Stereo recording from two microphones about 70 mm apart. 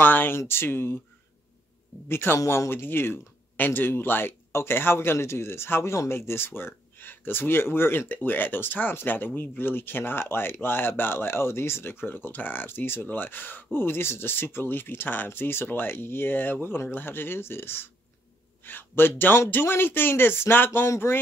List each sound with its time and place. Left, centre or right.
0.0 s speech: left
2.0 s speech: left